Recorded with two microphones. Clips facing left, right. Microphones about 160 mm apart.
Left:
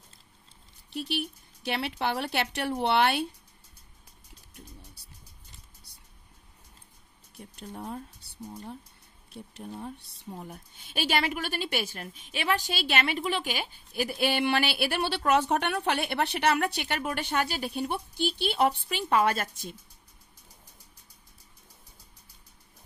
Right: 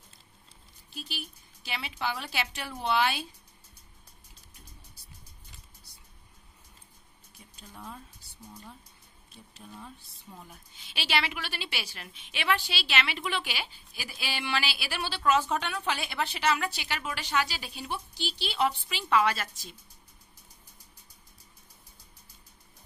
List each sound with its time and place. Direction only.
0.8 s speech: 65° left (ahead or behind)
7.3 s a sound: 60° left (ahead or behind)
9.3 s a woman's voice: 60° left (ahead or behind)